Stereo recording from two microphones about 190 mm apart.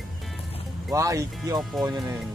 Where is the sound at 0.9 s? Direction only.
15° right (ahead or behind).